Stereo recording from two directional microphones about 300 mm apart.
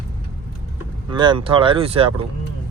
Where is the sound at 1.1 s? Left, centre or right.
Centre.